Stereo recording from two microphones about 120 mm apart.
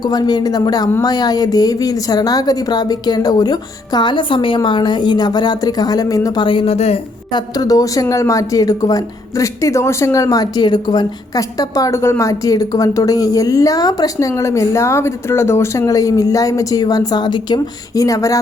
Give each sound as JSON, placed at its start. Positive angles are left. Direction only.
{"t": 0.0, "sound": "speech", "side_deg": 35}
{"t": 6.7, "sound": "a woman's voice", "side_deg": 60}
{"t": 7.3, "sound": "speech", "side_deg": 30}